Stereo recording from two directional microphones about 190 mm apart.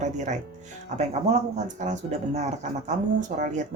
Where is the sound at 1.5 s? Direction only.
40° right (ahead or behind).